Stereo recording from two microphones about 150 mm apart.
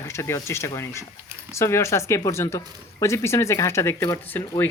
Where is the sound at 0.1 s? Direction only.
20° left (ahead or behind).